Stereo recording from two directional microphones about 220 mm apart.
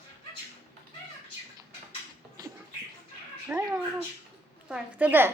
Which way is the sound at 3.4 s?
10° right (ahead or behind).